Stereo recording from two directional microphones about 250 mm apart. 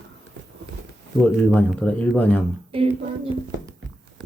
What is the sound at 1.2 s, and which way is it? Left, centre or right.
Speech, centre.